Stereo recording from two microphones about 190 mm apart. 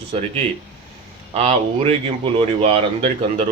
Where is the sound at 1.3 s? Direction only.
30° right (ahead or behind).